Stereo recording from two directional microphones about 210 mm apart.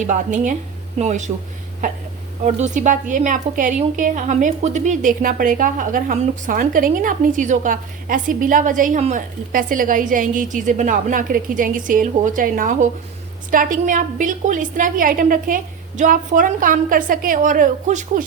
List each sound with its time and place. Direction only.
0.0 s a woman's voice: 35° right (ahead or behind)
2.4 s a woman's voice: 35° right (ahead or behind)